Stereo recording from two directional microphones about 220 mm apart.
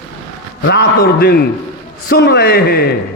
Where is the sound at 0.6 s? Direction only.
50° left (ahead or behind).